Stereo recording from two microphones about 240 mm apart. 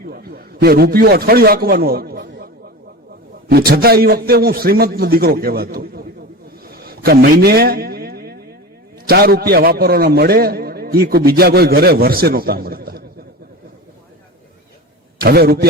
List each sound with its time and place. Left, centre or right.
0.0 s a man's voice: right
3.5 s a man's voice: right
6.7 s a sound: right
9.0 s a man's voice: right
15.2 s a man's voice: right